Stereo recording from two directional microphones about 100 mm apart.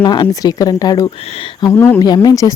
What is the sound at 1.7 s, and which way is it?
Speech, 25° left (ahead or behind).